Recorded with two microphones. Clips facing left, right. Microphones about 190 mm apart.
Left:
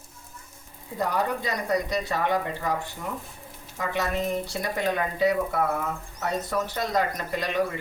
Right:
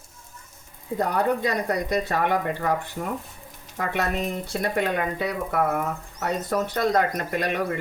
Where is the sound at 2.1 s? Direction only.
60° right (ahead or behind).